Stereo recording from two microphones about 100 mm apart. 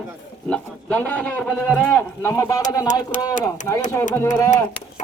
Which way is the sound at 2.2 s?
30° left (ahead or behind).